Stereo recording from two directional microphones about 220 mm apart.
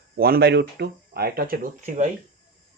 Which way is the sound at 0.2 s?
45° right (ahead or behind).